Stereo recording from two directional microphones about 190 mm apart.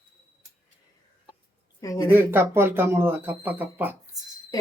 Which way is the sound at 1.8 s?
15° left (ahead or behind).